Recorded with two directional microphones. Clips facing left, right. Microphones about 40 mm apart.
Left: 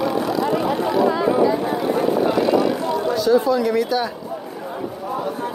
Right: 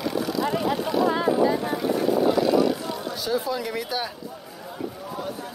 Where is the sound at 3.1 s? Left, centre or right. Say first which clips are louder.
Left 10 dB; centre.